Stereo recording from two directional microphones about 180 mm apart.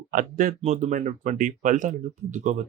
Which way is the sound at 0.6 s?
40° right (ahead or behind).